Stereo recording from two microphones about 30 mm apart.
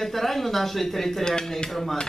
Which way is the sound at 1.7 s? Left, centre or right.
Centre.